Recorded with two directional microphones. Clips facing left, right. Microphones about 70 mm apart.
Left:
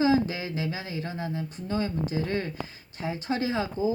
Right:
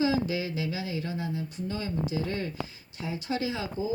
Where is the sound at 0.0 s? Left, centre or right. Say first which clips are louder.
Left 3 dB; left.